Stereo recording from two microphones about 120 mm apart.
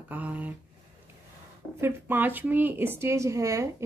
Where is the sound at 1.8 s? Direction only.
15° right (ahead or behind).